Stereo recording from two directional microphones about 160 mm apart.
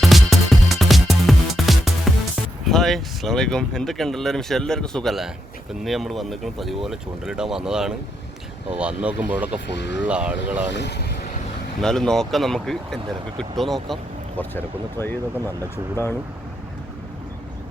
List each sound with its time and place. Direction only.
0.0 s music: centre (ahead or behind)
2.6 s speech: centre (ahead or behind)
9.7 s speech: 90° left
10.1 s speech: 5° right (ahead or behind)
10.7 s speech: 90° left
11.8 s speech: 5° left (ahead or behind)